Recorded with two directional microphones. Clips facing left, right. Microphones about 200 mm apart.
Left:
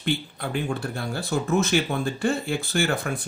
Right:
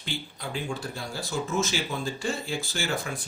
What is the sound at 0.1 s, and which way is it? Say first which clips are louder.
Speech: left 6 dB; 60° left (ahead or behind).